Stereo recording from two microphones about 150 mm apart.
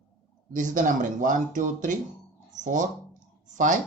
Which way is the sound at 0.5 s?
60° right (ahead or behind).